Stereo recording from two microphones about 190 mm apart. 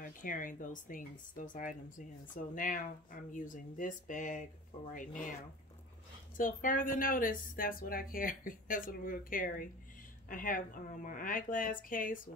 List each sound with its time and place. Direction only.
0.0 s speech: 45° left (ahead or behind)
6.3 s speech: 45° left (ahead or behind)